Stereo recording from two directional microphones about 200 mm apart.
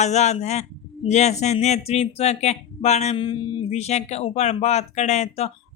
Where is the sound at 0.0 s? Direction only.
35° left (ahead or behind).